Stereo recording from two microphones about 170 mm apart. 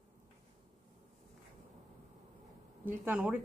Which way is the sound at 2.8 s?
10° right (ahead or behind).